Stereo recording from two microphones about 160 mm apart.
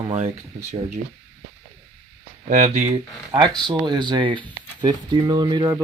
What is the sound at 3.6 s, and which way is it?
Speech, 30° right (ahead or behind).